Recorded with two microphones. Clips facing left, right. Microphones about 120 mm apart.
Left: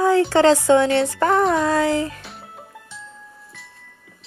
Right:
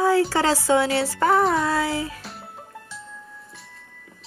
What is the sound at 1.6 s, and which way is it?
Music, 45° left (ahead or behind).